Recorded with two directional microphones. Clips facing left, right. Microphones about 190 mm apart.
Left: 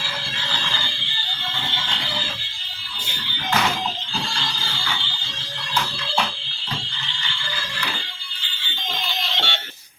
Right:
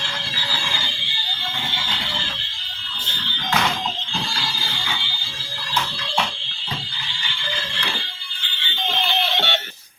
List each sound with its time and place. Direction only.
9.0 s music: 65° right (ahead or behind)